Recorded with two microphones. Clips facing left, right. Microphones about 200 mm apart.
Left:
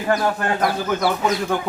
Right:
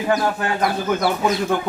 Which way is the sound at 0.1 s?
5° right (ahead or behind).